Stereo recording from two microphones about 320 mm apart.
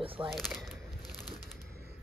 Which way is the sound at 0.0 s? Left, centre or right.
Centre.